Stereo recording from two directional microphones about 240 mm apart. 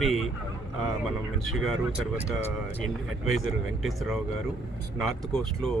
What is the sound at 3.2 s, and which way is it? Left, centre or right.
Speech, right.